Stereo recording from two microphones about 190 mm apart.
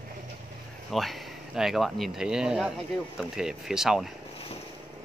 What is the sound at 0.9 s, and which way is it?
Speech, centre (ahead or behind).